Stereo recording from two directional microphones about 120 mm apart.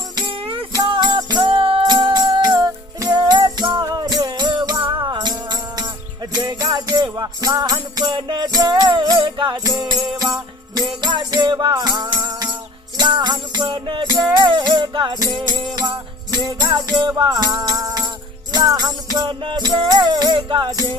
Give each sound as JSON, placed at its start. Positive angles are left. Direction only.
{"t": 0.2, "sound": "music", "side_deg": -45}